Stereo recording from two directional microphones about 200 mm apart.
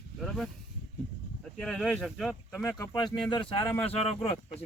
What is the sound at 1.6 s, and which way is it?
Speech, centre (ahead or behind).